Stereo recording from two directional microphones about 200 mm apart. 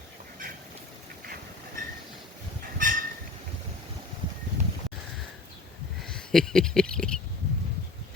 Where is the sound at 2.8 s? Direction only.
45° right (ahead or behind).